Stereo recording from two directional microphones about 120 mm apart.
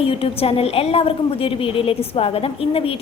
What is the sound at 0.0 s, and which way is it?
A woman's voice, 50° left (ahead or behind).